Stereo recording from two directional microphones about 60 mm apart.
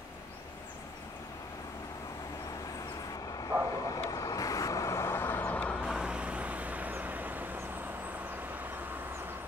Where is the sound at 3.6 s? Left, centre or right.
Left.